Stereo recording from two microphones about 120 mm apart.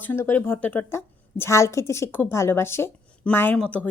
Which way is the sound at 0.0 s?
15° left (ahead or behind).